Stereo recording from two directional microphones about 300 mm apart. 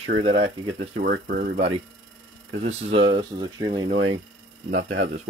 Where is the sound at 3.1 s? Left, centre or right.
Centre.